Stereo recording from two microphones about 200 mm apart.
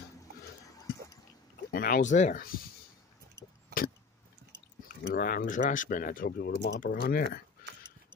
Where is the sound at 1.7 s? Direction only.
50° left (ahead or behind).